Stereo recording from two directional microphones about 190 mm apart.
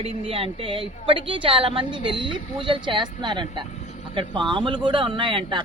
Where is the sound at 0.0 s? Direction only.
30° right (ahead or behind).